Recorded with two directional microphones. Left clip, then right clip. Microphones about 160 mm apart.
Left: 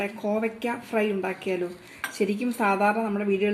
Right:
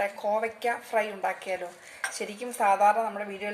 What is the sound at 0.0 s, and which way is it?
Speech, 40° left (ahead or behind).